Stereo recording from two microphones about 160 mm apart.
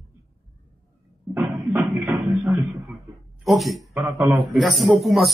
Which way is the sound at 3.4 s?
Centre (ahead or behind).